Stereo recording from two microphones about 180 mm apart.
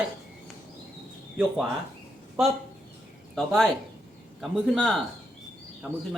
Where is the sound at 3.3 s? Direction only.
Centre (ahead or behind).